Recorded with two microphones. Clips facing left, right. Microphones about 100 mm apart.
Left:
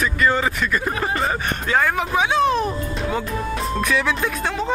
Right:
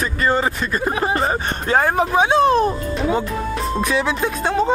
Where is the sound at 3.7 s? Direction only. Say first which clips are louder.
Right 1 dB; 25° right (ahead or behind).